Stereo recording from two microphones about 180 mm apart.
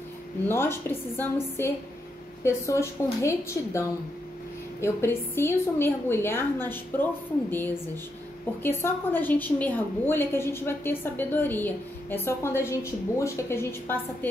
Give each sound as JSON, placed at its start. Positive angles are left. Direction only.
{"t": 0.5, "sound": "a woman's voice", "side_deg": 15}
{"t": 2.4, "sound": "a woman's voice", "side_deg": 15}